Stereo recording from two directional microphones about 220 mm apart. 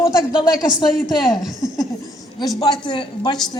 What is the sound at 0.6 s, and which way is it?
Speech, centre (ahead or behind).